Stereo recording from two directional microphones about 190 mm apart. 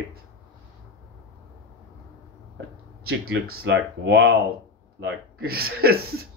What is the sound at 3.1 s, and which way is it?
Speech, 55° right (ahead or behind).